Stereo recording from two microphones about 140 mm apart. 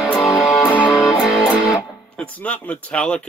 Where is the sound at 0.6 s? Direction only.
10° left (ahead or behind).